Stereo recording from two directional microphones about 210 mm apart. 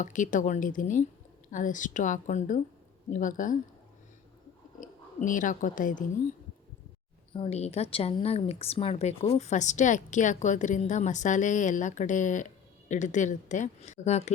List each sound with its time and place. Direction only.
0.0 s a woman's voice: 35° left (ahead or behind)
4.8 s speech: 40° left (ahead or behind)
7.3 s a woman's voice: 30° left (ahead or behind)